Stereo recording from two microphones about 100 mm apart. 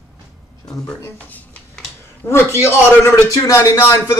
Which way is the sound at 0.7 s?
20° left (ahead or behind).